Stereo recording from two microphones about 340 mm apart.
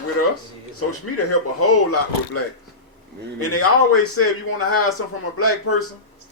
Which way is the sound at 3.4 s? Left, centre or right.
Left.